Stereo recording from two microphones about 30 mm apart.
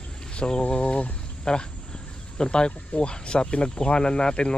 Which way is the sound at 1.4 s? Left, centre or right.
Left.